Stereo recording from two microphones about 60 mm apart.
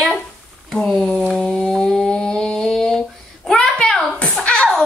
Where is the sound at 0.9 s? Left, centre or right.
Centre.